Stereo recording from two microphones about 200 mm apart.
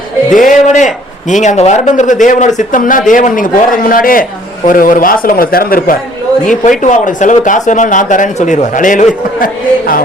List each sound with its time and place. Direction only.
0.3 s a man's voice: 40° left (ahead or behind)